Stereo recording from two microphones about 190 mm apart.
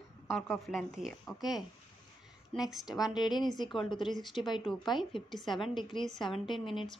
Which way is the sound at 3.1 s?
20° left (ahead or behind).